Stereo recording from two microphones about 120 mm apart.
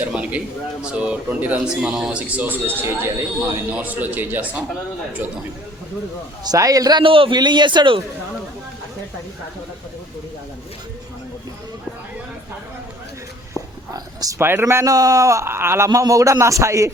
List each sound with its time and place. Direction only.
0.0 s a man's voice: 10° right (ahead or behind)
6.4 s a man's voice: 30° right (ahead or behind)
7.0 s a man's voice: 45° right (ahead or behind)
13.5 s speech: 30° right (ahead or behind)